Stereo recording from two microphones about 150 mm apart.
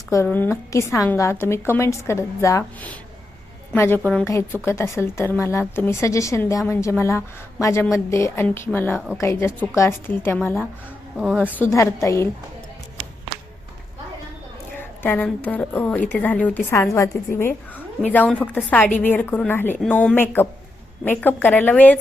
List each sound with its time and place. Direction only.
0.3 s a woman's voice: 15° left (ahead or behind)
14.8 s a woman's voice: 15° left (ahead or behind)